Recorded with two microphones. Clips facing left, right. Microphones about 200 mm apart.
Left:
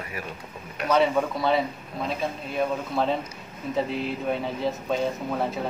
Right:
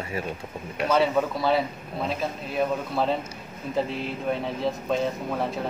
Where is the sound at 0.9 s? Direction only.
Centre (ahead or behind).